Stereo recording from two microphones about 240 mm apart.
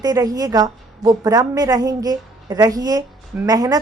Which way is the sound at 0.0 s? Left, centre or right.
Centre.